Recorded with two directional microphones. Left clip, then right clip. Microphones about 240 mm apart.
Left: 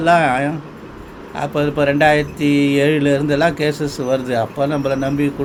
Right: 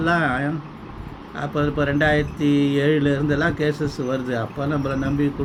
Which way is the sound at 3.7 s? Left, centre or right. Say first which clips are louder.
Left 4 dB; left.